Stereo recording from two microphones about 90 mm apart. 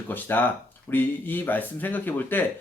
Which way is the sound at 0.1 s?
20° left (ahead or behind).